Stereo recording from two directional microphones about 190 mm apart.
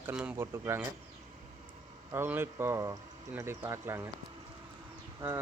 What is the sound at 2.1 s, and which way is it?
Speech, 10° right (ahead or behind).